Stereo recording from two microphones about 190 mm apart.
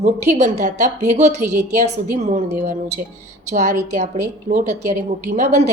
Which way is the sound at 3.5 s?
40° right (ahead or behind).